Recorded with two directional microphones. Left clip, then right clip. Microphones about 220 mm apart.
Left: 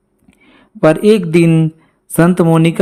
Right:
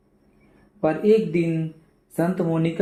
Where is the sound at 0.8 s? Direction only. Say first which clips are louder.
Left 9 dB; 40° left (ahead or behind).